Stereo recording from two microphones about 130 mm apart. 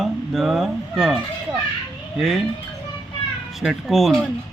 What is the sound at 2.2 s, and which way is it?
Speech, centre (ahead or behind).